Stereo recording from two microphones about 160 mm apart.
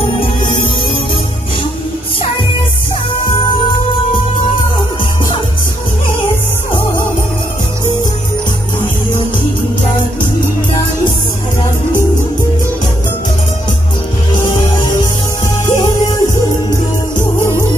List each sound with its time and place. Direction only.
14.4 s music: 25° left (ahead or behind)